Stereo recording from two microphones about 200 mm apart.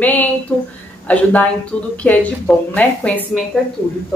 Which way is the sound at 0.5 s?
5° left (ahead or behind).